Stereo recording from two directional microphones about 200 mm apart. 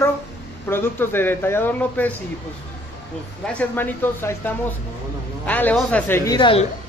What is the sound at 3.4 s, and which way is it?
Speech, 10° left (ahead or behind).